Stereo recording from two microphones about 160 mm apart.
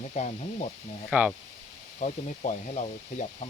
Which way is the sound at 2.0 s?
50° left (ahead or behind).